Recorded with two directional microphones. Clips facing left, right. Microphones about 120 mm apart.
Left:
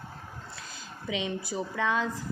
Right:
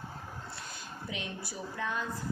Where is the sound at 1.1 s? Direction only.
90° left.